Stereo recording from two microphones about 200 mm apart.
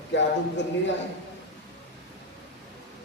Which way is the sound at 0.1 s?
60° left (ahead or behind).